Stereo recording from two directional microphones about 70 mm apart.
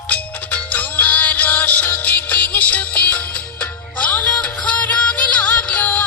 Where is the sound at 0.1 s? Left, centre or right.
Centre.